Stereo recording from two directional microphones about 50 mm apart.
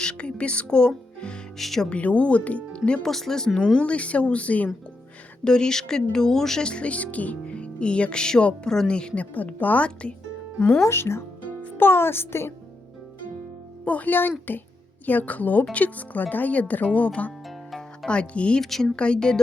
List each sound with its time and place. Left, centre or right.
0.0 s speech: centre
1.5 s speech: centre
1.9 s speech: left
3.0 s speech: centre
3.8 s speech: left
5.5 s speech: centre
9.3 s speech: left
10.8 s a child's voice: left
13.8 s speech: left
17.7 s speech: centre
18.6 s speech: centre
18.9 s speech: centre